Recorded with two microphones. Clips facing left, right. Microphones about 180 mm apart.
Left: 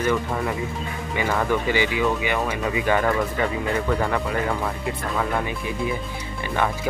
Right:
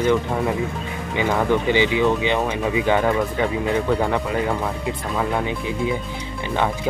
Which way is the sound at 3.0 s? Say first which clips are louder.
Right 2 dB; 10° right (ahead or behind).